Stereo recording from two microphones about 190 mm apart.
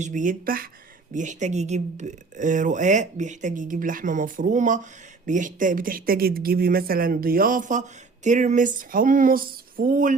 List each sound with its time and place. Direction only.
0.0 s speech: 40° right (ahead or behind)